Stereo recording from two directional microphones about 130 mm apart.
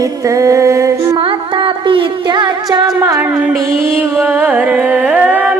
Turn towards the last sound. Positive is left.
turn(degrees=-15)  # may be behind; listen again after turning